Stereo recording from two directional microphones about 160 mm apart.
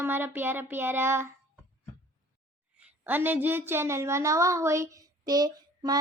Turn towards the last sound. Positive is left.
turn(degrees=-25)  # may be behind; listen again after turning